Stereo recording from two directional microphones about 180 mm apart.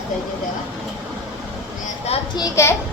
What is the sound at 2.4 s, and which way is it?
Speech, 15° left (ahead or behind).